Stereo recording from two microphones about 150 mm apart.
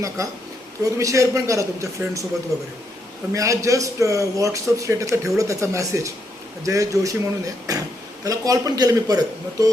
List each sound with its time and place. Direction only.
0.9 s a man's voice: 20° right (ahead or behind)